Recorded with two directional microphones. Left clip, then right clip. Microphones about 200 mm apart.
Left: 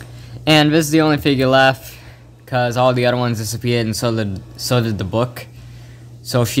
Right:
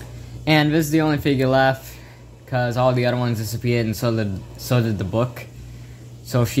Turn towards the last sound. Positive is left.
turn(degrees=30)  # may be behind; listen again after turning